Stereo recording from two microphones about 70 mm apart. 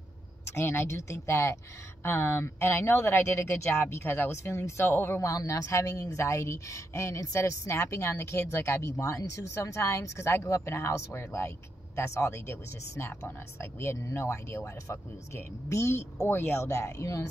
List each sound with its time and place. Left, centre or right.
0.6 s speech: left
5.2 s speech: left